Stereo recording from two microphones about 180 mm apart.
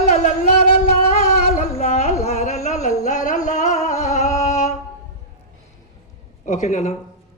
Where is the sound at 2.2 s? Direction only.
40° left (ahead or behind).